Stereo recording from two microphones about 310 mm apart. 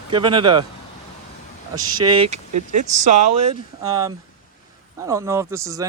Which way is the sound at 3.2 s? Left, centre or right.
Right.